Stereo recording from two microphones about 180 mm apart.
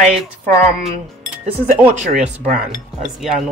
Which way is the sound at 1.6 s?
45° right (ahead or behind).